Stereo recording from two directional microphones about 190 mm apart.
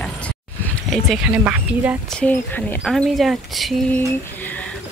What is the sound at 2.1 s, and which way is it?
Speech, 5° left (ahead or behind).